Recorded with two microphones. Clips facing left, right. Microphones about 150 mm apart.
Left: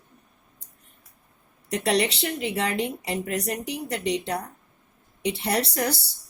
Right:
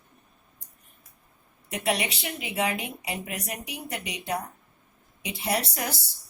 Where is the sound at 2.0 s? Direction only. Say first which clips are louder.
Left 7 dB; 70° left (ahead or behind).